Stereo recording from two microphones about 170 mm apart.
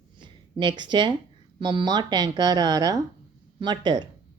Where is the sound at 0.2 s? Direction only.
30° right (ahead or behind).